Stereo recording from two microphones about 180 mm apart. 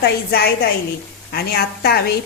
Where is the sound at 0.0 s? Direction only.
60° left (ahead or behind).